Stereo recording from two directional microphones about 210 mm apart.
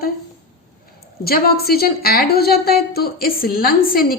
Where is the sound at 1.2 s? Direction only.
45° left (ahead or behind).